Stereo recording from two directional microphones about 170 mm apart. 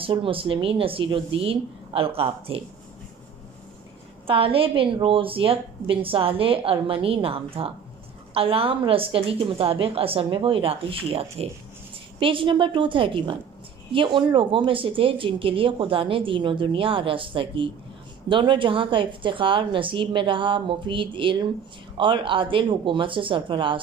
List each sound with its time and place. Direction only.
0.0 s a woman's voice: 30° right (ahead or behind)
4.3 s a woman's voice: 35° right (ahead or behind)